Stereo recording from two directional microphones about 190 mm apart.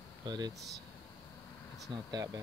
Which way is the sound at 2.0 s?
20° right (ahead or behind).